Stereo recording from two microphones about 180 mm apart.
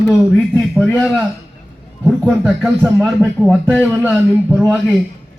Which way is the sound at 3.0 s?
Centre (ahead or behind).